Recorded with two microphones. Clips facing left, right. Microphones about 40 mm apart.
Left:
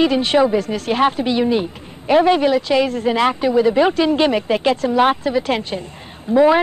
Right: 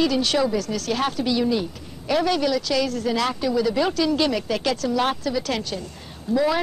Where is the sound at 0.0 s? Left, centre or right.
Left.